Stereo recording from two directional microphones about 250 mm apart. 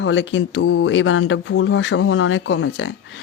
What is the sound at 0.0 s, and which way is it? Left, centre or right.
Speech, left.